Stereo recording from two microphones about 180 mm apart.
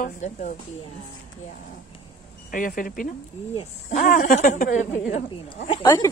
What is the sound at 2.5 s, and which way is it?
A woman's voice, 50° left (ahead or behind).